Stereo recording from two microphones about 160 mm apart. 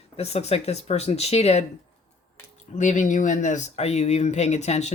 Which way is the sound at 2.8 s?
50° left (ahead or behind).